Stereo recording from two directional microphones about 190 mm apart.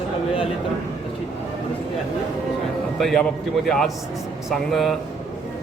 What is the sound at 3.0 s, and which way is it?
Speech, centre (ahead or behind).